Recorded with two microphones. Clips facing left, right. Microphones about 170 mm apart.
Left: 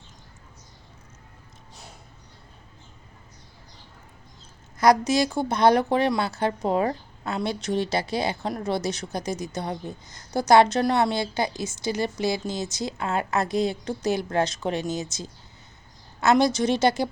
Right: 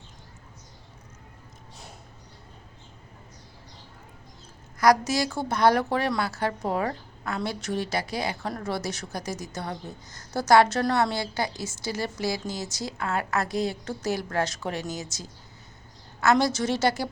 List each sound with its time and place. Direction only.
4.8 s a woman's voice: 20° left (ahead or behind)